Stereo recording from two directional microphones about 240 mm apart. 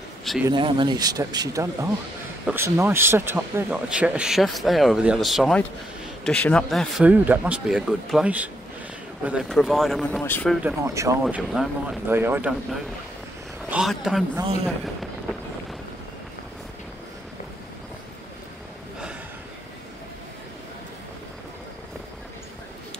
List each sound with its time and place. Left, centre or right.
0.5 s speech: right; by 10.6 s centre
10.6 s speech: centre
13.7 s a sound: centre